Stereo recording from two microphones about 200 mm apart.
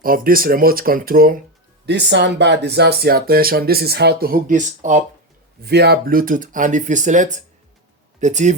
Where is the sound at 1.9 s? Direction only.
60° right (ahead or behind); by 4.9 s 40° right (ahead or behind).